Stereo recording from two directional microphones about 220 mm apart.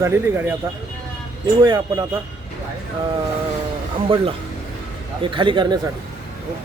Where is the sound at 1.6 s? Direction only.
20° right (ahead or behind).